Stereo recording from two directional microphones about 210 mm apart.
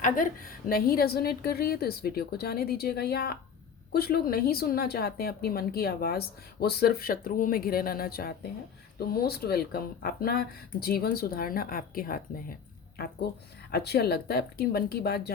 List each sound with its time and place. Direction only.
0.7 s a woman's voice: 45° left (ahead or behind)
13.7 s a woman's voice: 50° left (ahead or behind)